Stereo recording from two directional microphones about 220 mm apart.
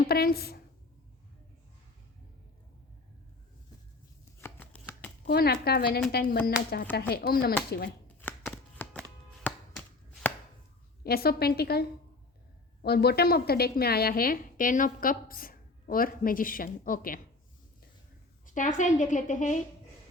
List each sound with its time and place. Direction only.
0.0 s a woman's voice: 45° left (ahead or behind)
4.4 s shuffling cards: 10° left (ahead or behind)
5.2 s a woman's voice: 45° left (ahead or behind)
8.8 s a sound: 5° left (ahead or behind)
11.0 s a woman's voice: 45° left (ahead or behind)
18.4 s a woman's voice: 35° left (ahead or behind)